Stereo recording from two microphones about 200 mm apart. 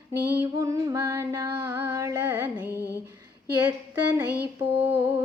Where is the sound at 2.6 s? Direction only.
15° left (ahead or behind).